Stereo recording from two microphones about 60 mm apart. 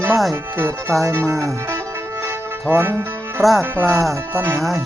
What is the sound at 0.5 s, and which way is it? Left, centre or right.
Speech, right.